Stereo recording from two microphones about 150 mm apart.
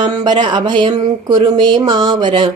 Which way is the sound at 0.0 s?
30° right (ahead or behind).